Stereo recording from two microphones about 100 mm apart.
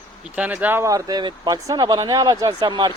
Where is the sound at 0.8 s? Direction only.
35° right (ahead or behind).